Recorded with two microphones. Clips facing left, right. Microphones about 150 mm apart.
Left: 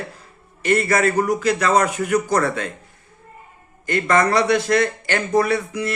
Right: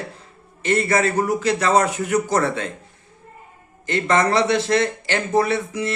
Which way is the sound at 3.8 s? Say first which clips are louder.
Left 1 dB; 25° right (ahead or behind).